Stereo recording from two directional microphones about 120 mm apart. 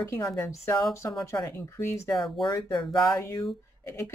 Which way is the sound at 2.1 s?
Centre (ahead or behind).